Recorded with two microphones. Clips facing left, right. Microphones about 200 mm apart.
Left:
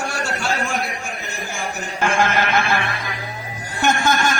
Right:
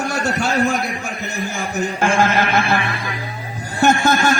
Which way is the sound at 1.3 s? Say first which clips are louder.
Right 5 dB; 40° right (ahead or behind).